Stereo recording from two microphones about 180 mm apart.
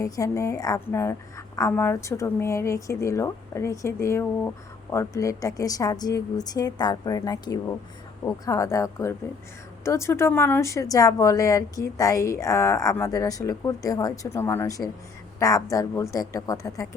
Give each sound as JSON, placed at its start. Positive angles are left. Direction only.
{"t": 0.0, "sound": "a woman's voice", "side_deg": 15}